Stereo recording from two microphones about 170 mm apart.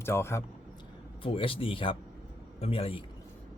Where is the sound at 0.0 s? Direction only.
15° left (ahead or behind).